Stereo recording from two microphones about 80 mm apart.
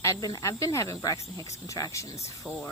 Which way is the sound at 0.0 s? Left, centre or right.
Left.